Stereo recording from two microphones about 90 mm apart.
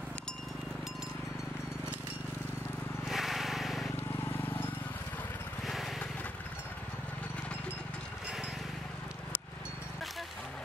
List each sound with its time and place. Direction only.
3.1 s vehicle: centre (ahead or behind)
4.2 s vehicle: 20° left (ahead or behind)
5.7 s vehicle: centre (ahead or behind)